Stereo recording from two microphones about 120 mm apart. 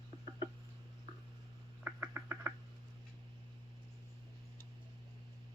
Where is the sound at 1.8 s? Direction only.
20° right (ahead or behind).